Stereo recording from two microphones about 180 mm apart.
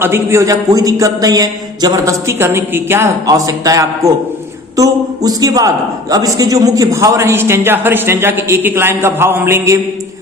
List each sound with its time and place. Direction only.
0.0 s a man's voice: 15° right (ahead or behind)